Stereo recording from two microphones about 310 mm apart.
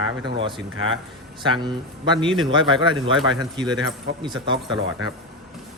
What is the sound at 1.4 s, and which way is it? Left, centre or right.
Speech, centre.